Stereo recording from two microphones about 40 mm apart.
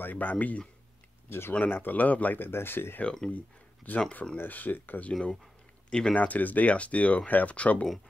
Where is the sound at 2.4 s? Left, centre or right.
Left.